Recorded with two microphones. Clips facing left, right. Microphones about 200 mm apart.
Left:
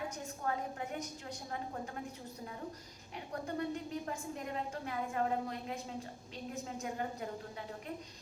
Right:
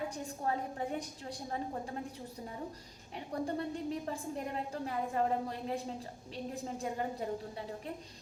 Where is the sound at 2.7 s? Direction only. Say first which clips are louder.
Right 1 dB; 30° right (ahead or behind).